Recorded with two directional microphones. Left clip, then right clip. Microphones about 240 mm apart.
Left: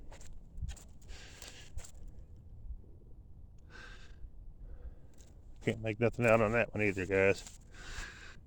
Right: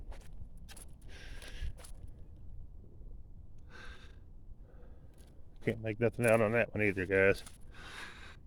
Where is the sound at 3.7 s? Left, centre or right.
Centre.